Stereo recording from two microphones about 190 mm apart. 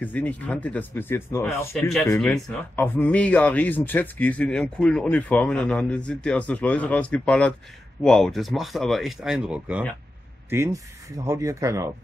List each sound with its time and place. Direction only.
0.0 s speech: 10° left (ahead or behind)
1.8 s speech: centre (ahead or behind); by 11.9 s 15° right (ahead or behind)